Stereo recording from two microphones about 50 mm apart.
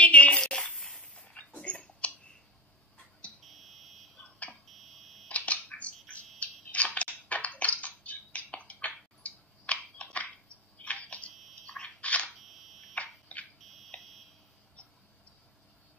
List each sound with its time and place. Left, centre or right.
0.0 s a sound: left
0.4 s a sound: centre
3.4 s smoke detector: centre
4.2 s smoke detector: left
4.6 s fire alarm: centre
5.3 s a sound: left
6.4 s crushing: left
8.8 s a sound: left
11.6 s camera: left
12.4 s camera: centre
12.9 s fire alarm: left
13.6 s fire alarm: centre